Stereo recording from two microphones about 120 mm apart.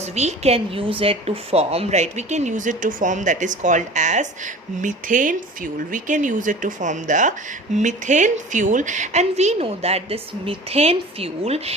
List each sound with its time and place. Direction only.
0.0 s a woman's voice: 65° right (ahead or behind)